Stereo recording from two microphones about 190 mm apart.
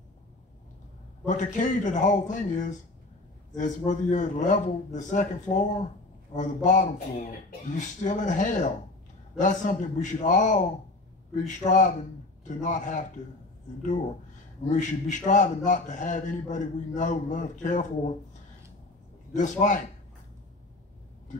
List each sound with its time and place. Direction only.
1.2 s a man's voice: 40° left (ahead or behind)
14.7 s a man's voice: 40° left (ahead or behind)
19.3 s a man's voice: 40° left (ahead or behind)